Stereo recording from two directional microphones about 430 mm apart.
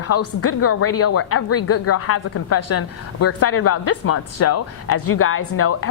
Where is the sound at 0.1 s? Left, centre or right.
Left.